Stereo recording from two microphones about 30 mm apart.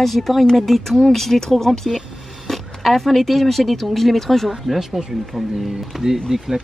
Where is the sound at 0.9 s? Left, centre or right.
Centre.